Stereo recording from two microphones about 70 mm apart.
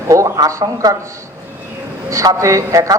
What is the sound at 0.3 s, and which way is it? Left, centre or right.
Speech, right.